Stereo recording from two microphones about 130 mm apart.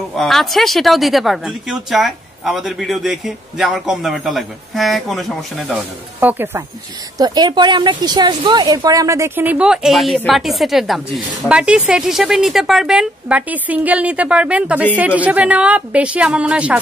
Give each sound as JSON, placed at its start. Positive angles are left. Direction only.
{"t": 0.1, "sound": "speech", "side_deg": 0}
{"t": 6.1, "sound": "speech", "side_deg": -15}
{"t": 7.2, "sound": "a woman's voice", "side_deg": -30}